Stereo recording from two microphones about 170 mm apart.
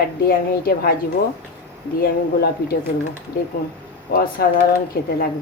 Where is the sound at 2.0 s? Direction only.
65° left (ahead or behind).